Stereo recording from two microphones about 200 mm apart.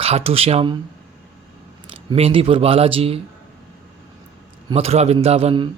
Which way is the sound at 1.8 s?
25° right (ahead or behind).